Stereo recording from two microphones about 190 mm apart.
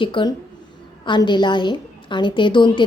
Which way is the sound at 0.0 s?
25° left (ahead or behind).